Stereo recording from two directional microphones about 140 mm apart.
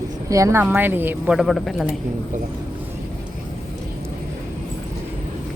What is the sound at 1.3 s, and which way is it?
Speech, centre (ahead or behind).